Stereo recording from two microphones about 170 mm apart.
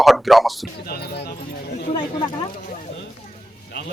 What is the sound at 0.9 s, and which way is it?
Speech, 70° left (ahead or behind).